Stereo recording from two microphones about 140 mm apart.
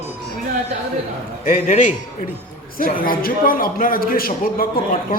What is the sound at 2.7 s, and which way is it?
A man's voice, 90° left.